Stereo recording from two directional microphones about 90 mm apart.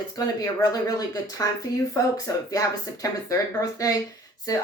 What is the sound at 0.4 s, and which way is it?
Speech, 45° left (ahead or behind).